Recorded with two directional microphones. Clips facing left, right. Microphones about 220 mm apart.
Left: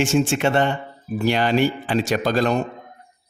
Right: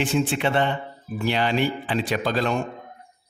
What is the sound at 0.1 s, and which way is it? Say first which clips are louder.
Speech: left 4 dB; 45° left (ahead or behind).